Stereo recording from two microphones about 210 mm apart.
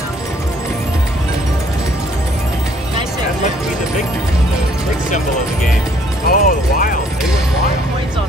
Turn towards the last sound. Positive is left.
turn(degrees=40)  # may be behind; listen again after turning